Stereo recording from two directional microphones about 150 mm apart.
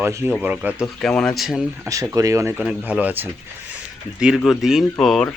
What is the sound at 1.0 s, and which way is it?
Speech, 5° left (ahead or behind).